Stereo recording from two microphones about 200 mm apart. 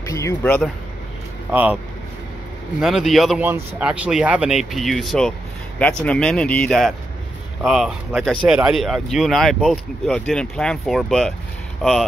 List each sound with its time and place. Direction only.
0.0 s speech: 15° left (ahead or behind)
1.5 s speech: 10° right (ahead or behind)
2.8 s speech: centre (ahead or behind)